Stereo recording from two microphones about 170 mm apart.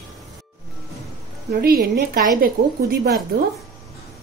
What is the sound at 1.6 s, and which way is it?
Speech, 60° right (ahead or behind).